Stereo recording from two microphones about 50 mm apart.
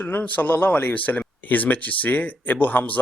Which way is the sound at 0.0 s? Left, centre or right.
Left.